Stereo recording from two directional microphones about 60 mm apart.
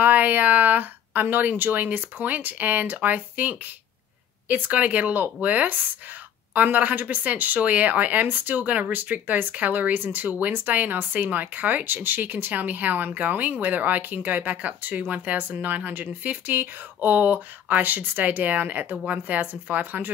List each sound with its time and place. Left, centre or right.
0.0 s speech: right